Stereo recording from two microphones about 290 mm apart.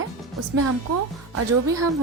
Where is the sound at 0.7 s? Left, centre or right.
Right.